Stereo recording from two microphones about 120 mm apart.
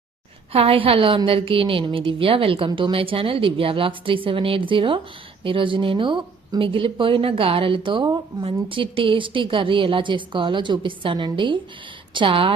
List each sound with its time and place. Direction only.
0.5 s a woman's voice: 55° right (ahead or behind)